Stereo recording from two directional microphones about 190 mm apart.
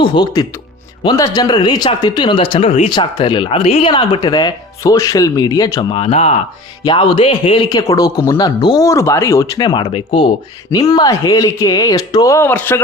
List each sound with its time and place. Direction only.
0.0 s a man's voice: 25° left (ahead or behind)
6.0 s a man's voice: 35° left (ahead or behind); by 12.8 s 10° left (ahead or behind)